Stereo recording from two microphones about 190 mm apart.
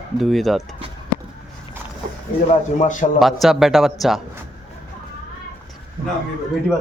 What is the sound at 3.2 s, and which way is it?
Speech, centre (ahead or behind).